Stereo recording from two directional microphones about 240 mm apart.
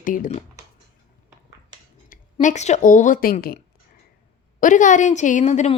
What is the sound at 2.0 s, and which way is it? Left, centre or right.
Speech, left.